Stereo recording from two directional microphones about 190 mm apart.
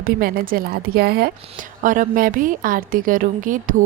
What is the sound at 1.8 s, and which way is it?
A woman's voice, 45° right (ahead or behind).